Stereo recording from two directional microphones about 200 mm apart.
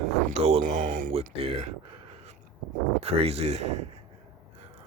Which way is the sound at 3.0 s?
30° right (ahead or behind).